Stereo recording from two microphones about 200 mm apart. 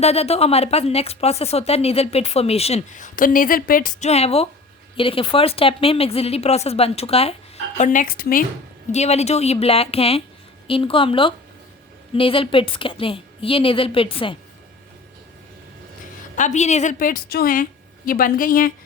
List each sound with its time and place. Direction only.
0.0 s a woman's voice: 30° left (ahead or behind); by 8.4 s 45° left (ahead or behind)
8.9 s a woman's voice: 35° left (ahead or behind)
16.3 s a woman's voice: 40° left (ahead or behind)